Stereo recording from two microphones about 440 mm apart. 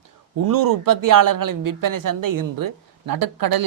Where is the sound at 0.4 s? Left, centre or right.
Right.